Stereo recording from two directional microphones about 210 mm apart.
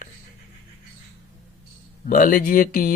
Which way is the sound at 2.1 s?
40° left (ahead or behind).